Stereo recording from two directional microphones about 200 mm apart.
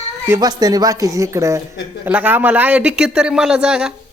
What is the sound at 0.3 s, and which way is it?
A woman's voice, 20° right (ahead or behind).